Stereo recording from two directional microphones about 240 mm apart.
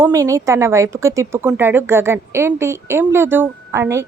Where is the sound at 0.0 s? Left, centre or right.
Centre.